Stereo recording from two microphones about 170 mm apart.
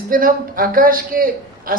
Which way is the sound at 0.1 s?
55° right (ahead or behind).